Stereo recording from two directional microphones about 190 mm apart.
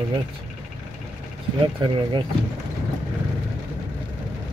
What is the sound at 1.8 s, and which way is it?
Speech, 25° right (ahead or behind).